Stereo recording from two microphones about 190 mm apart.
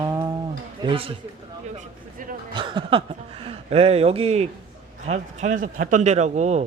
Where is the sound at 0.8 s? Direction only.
30° right (ahead or behind).